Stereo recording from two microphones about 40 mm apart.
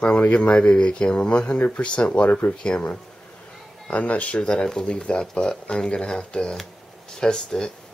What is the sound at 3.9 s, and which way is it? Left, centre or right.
Speech, left.